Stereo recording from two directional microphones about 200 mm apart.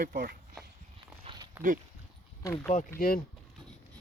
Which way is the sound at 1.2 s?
25° right (ahead or behind).